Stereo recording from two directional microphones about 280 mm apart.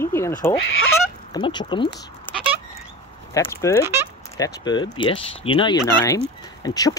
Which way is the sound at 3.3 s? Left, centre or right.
Centre.